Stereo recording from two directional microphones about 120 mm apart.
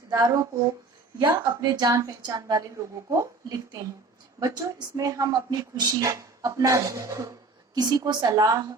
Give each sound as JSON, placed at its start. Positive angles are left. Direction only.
{"t": 0.1, "sound": "a woman's voice", "side_deg": -30}